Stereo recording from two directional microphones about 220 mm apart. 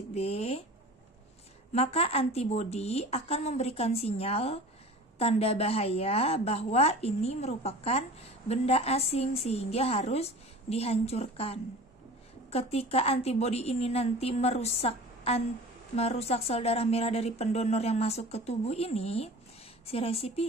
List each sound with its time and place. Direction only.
0.1 s a woman's voice: 30° left (ahead or behind)
1.7 s a woman's voice: 30° left (ahead or behind)